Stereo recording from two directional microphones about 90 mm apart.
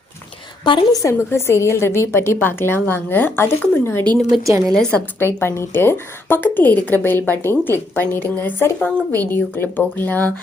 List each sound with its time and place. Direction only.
0.6 s a woman's voice: 65° left (ahead or behind)
0.9 s a woman's voice: 30° left (ahead or behind)
4.6 s a woman's voice: 5° left (ahead or behind)
5.2 s a woman's voice: 30° left (ahead or behind)